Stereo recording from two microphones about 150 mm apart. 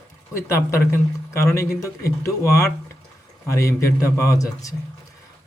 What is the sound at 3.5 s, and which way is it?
A man's voice, 20° left (ahead or behind).